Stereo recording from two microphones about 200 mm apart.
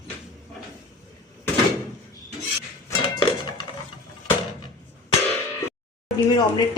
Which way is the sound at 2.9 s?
20° left (ahead or behind).